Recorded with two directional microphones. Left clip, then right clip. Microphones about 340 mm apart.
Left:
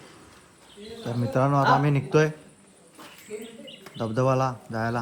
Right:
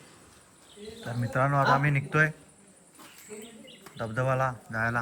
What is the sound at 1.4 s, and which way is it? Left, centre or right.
Speech, centre.